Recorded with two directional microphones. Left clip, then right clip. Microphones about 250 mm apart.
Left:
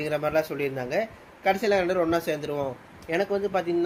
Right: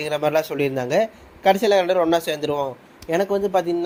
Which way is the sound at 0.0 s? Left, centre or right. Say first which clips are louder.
Right 5 dB; right.